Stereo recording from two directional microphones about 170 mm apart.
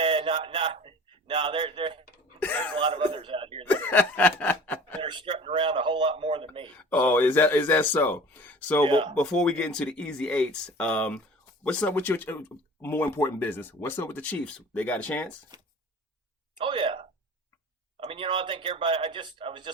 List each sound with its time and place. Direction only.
0.0 s a man's voice: 30° right (ahead or behind)
3.7 s snicker: 10° left (ahead or behind)
5.0 s speech: 30° right (ahead or behind)
6.7 s speech: 10° left (ahead or behind)
8.9 s speech: 30° right (ahead or behind)
9.1 s speech: 5° left (ahead or behind)
15.5 s a sound: 25° right (ahead or behind)
18.0 s speech: 30° right (ahead or behind)